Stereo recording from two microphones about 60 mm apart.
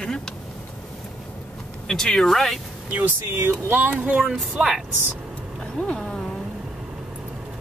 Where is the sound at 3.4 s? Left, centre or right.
Right.